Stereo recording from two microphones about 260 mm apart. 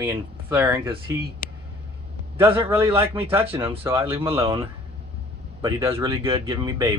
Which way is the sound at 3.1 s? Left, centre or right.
Centre.